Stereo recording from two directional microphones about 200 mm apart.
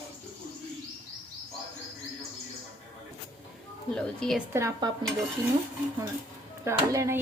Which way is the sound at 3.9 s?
5° left (ahead or behind).